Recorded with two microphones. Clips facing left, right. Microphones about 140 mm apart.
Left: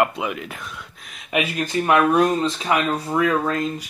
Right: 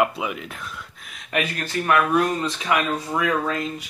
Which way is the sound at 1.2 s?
10° left (ahead or behind).